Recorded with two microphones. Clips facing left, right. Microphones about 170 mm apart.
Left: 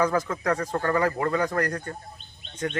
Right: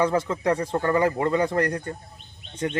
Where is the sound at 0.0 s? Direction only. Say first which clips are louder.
Right 2 dB; 25° right (ahead or behind).